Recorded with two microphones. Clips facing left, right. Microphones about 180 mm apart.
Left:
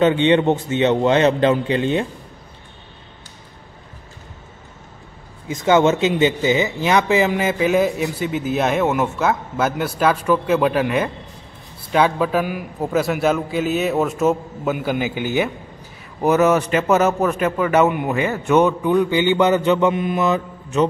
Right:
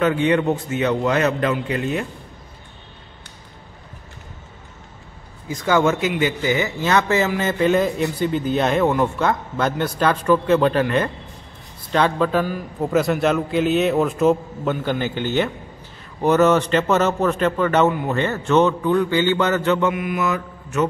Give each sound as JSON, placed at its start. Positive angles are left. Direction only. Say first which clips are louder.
{"t": 0.0, "sound": "a man's voice", "louder": "left 3 dB", "side_deg": 25}
{"t": 5.5, "sound": "a man's voice", "louder": "left 3 dB", "side_deg": 20}
{"t": 19.9, "sound": "mantra", "louder": "left 3 dB", "side_deg": 25}